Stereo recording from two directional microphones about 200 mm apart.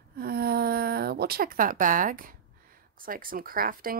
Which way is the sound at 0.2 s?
50° right (ahead or behind).